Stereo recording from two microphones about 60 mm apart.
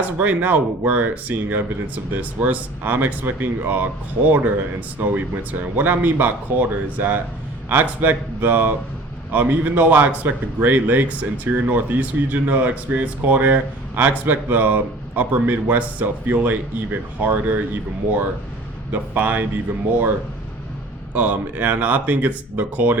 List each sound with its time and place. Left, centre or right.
0.2 s a man's voice: right
18.9 s a man's voice: right
21.1 s a man's voice: right